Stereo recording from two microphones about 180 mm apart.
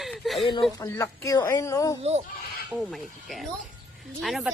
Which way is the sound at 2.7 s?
Centre (ahead or behind).